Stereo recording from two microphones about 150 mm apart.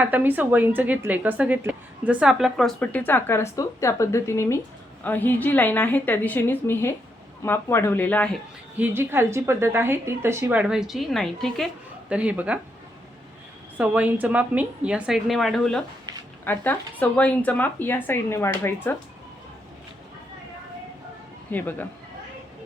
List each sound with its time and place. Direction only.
0.0 s a woman's voice: 10° right (ahead or behind); by 8.4 s 10° left (ahead or behind)
8.8 s a woman's voice: 15° right (ahead or behind)
13.7 s a woman's voice: 10° right (ahead or behind)
16.4 s speech: 15° left (ahead or behind)
21.5 s speech: 10° left (ahead or behind)